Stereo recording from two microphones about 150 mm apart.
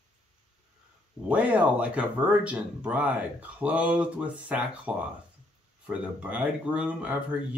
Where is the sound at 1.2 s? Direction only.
10° right (ahead or behind).